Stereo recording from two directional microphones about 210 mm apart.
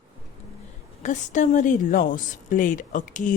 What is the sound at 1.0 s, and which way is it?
Speech, 35° left (ahead or behind).